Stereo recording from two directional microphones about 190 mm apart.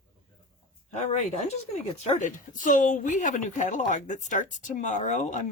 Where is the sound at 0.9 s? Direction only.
35° left (ahead or behind).